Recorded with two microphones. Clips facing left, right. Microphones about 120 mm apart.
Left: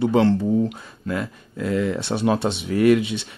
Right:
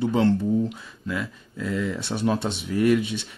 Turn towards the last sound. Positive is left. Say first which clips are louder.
# left 4 dB
turn(degrees=75)  # may be behind; listen again after turning